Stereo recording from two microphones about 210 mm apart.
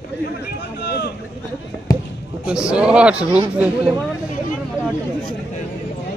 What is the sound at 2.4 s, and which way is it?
Speech, 5° right (ahead or behind).